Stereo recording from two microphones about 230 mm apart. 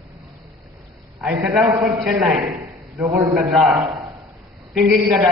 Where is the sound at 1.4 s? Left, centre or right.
Centre.